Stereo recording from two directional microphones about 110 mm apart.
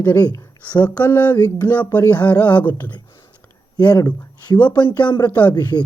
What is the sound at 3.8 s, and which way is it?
Speech, 40° left (ahead or behind).